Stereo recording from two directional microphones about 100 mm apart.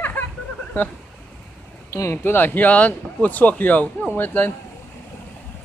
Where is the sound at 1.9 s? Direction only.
25° left (ahead or behind).